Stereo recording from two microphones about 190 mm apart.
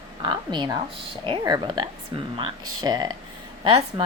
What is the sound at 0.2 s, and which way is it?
Speech, 25° right (ahead or behind).